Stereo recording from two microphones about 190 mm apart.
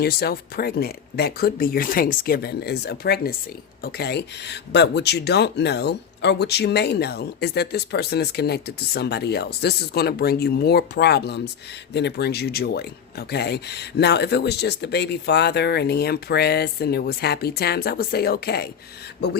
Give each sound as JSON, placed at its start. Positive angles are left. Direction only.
{"t": 0.0, "sound": "speech", "side_deg": 55}